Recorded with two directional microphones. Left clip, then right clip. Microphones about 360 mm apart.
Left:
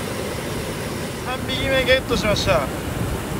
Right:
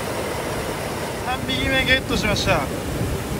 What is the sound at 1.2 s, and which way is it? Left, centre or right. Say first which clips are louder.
Speech: even; centre.